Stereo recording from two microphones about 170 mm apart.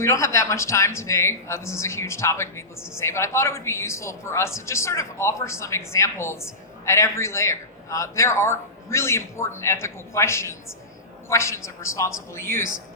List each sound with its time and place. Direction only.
0.0 s a man's voice: 15° left (ahead or behind)